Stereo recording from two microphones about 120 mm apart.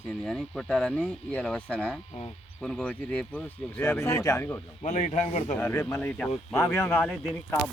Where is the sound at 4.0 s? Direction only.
25° left (ahead or behind).